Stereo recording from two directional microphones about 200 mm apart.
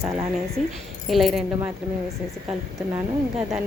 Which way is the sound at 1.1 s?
Centre (ahead or behind).